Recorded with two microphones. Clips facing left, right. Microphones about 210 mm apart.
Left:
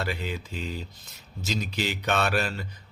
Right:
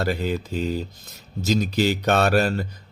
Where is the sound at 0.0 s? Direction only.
40° right (ahead or behind).